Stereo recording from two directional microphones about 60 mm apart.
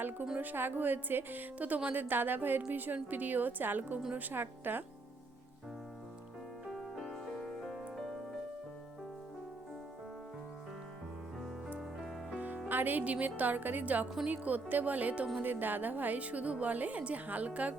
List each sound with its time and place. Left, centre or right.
0.0 s music: right
0.3 s a woman's voice: right
6.7 s music: centre
11.8 s music: centre
12.6 s a woman's voice: right